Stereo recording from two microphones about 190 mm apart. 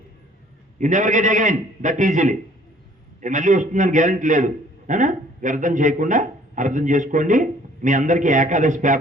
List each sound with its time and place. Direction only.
0.8 s a man's voice: 40° right (ahead or behind)